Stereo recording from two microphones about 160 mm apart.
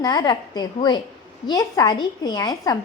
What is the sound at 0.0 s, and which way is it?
A woman's voice, 25° left (ahead or behind).